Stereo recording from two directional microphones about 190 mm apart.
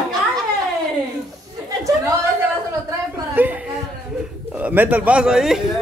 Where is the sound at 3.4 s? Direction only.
10° right (ahead or behind).